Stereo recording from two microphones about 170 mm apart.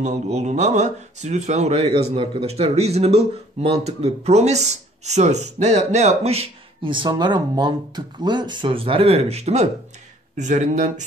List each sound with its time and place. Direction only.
0.0 s speech: 45° right (ahead or behind)